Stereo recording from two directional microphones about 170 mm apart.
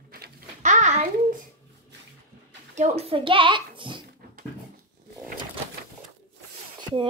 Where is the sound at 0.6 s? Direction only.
45° right (ahead or behind).